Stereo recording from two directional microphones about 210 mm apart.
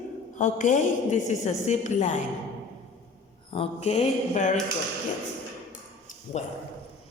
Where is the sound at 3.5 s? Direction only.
30° left (ahead or behind).